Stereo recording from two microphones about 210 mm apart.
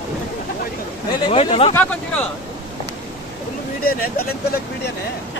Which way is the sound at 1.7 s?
5° left (ahead or behind).